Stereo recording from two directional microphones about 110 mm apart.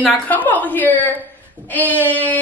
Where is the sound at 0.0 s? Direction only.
15° left (ahead or behind).